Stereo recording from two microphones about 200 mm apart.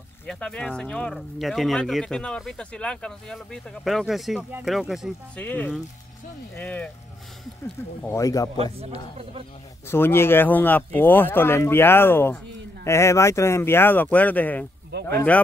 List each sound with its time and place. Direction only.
0.3 s speech: 5° left (ahead or behind)
8.0 s speech: 15° left (ahead or behind)
8.7 s speech: 30° right (ahead or behind)
9.8 s speech: 10° left (ahead or behind)